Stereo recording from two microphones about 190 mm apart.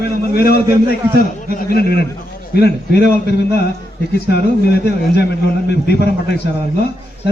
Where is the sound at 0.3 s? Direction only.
55° left (ahead or behind).